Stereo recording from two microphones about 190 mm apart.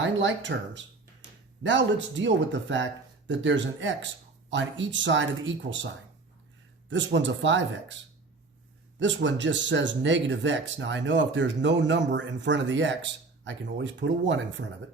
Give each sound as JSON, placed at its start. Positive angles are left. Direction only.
{"t": 0.0, "sound": "speech", "side_deg": -75}
{"t": 6.9, "sound": "speech", "side_deg": -75}
{"t": 9.0, "sound": "speech", "side_deg": -70}